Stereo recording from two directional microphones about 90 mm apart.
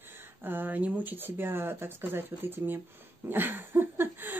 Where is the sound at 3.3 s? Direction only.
25° right (ahead or behind).